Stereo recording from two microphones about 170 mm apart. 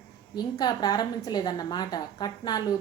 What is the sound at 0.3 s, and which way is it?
A woman's voice, 25° left (ahead or behind).